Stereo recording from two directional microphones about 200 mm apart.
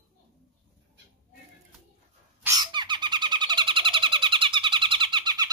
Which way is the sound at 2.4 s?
20° right (ahead or behind).